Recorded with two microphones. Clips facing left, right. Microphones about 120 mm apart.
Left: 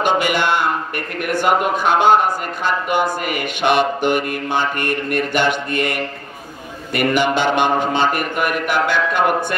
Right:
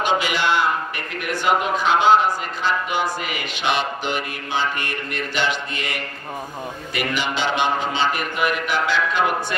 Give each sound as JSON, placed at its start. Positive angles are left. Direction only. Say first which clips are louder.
{"t": 0.0, "sound": "a man's voice", "louder": "left 4 dB", "side_deg": 50}